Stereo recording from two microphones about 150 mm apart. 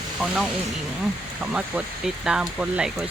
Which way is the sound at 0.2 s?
5° right (ahead or behind).